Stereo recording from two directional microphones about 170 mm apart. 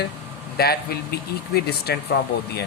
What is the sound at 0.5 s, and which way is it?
Speech, 65° left (ahead or behind).